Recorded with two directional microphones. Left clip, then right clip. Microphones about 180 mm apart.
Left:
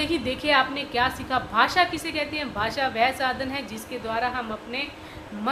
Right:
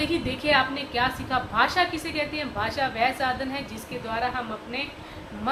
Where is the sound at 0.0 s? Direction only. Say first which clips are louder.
Left 1 dB; 45° left (ahead or behind).